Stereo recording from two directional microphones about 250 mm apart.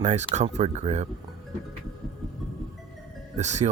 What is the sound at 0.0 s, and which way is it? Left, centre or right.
Speech, right.